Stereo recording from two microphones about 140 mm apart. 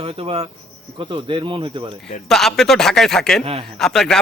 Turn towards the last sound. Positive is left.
turn(degrees=5)  # may be behind; listen again after turning